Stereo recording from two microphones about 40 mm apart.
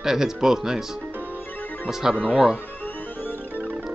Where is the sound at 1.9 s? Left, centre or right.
Centre.